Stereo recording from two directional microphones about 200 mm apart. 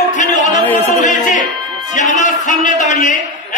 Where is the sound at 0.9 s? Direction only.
40° left (ahead or behind).